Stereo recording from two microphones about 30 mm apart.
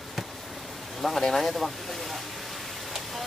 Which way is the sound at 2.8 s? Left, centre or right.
Centre.